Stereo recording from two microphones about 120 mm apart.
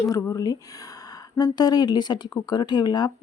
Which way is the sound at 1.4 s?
35° left (ahead or behind).